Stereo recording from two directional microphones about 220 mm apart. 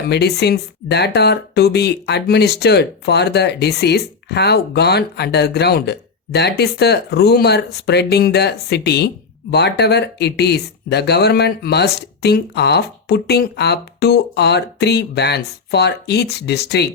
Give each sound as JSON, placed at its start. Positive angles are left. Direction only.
{"t": 0.1, "sound": "speech", "side_deg": 50}